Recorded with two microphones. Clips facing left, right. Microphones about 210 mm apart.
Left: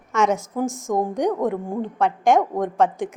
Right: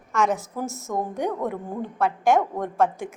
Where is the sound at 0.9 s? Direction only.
15° left (ahead or behind).